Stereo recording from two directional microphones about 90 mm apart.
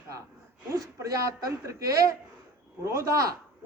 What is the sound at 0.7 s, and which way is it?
A woman's voice, 40° right (ahead or behind).